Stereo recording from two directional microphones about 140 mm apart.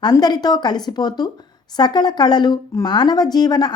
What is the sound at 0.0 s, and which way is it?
A woman's voice, 30° left (ahead or behind).